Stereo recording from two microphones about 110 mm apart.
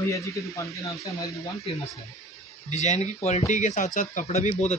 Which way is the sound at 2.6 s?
90° left.